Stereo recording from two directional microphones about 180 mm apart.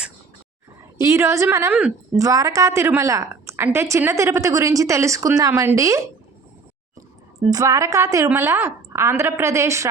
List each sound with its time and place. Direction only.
0.9 s a woman's voice: 15° right (ahead or behind)
7.3 s a woman's voice: 20° right (ahead or behind)